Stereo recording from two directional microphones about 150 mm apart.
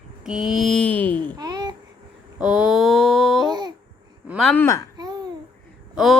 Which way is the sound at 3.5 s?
30° right (ahead or behind).